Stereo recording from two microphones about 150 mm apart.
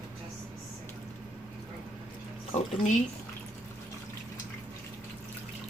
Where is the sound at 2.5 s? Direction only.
45° left (ahead or behind).